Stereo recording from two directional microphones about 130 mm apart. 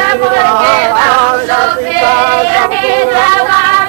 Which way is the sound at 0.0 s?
25° right (ahead or behind).